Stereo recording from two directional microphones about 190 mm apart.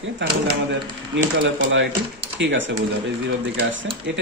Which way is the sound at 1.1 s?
75° right (ahead or behind).